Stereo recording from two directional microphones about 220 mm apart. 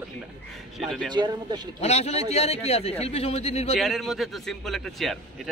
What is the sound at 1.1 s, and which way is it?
Speech, 20° right (ahead or behind).